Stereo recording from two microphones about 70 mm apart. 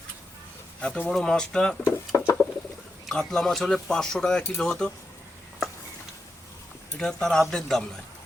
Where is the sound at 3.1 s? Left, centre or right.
Centre.